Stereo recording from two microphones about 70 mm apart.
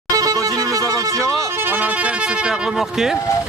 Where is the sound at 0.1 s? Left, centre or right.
Right.